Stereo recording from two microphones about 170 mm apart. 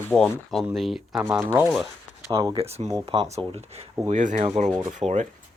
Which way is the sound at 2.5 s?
35° right (ahead or behind).